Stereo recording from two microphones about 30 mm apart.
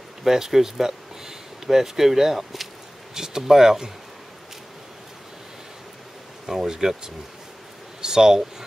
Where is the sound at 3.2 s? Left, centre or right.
Centre.